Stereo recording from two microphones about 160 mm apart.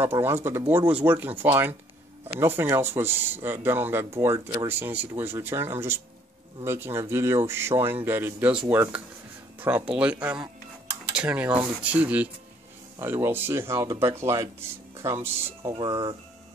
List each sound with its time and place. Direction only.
0.0 s speech: 15° right (ahead or behind)